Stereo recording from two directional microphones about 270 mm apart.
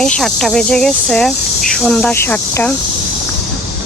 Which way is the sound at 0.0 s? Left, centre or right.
Centre.